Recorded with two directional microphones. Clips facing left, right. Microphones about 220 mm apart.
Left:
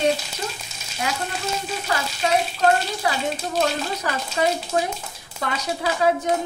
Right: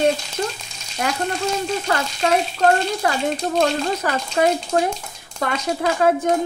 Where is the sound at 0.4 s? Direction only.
50° right (ahead or behind).